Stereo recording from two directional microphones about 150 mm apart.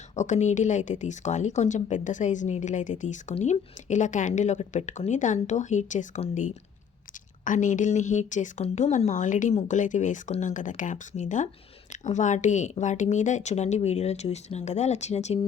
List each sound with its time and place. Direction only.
0.2 s a woman's voice: 50° left (ahead or behind)